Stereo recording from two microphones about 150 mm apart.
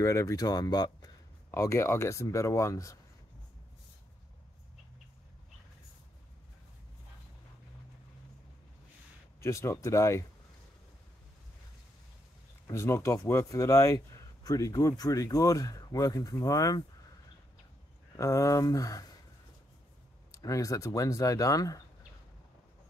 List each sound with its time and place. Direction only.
0.0 s speech: 20° left (ahead or behind)
9.4 s speech: 20° left (ahead or behind)
12.6 s speech: 20° left (ahead or behind)
18.1 s speech: 20° left (ahead or behind)
20.2 s speech: 20° left (ahead or behind)